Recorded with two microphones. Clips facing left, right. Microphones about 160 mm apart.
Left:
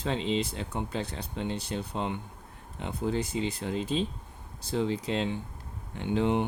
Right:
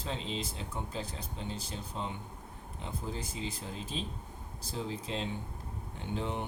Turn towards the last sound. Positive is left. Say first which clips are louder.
# left 9 dB
turn(degrees=75)  # may be behind; listen again after turning